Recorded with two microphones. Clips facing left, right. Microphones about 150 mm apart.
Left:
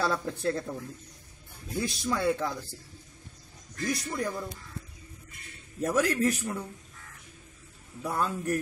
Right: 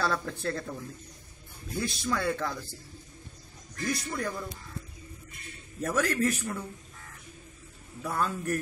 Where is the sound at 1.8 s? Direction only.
15° left (ahead or behind).